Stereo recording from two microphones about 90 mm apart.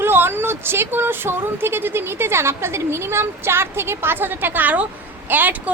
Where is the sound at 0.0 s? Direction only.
25° right (ahead or behind).